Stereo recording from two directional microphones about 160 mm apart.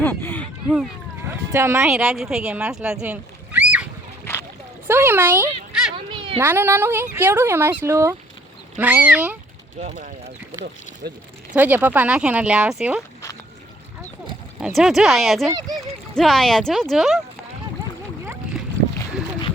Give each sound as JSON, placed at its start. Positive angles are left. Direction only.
{"t": 0.0, "sound": "a sound", "side_deg": 10}
{"t": 1.3, "sound": "speech", "side_deg": -15}
{"t": 1.9, "sound": "speech", "side_deg": -5}
{"t": 4.9, "sound": "speech", "side_deg": -15}
{"t": 6.1, "sound": "a sound", "side_deg": -35}
{"t": 6.4, "sound": "speech", "side_deg": -15}
{"t": 11.5, "sound": "speech", "side_deg": -10}
{"t": 14.6, "sound": "speech", "side_deg": 0}
{"t": 15.4, "sound": "speech", "side_deg": -25}
{"t": 15.7, "sound": "speech", "side_deg": 0}